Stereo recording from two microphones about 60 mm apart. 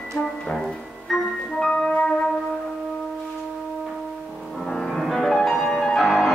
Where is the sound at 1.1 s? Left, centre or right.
Centre.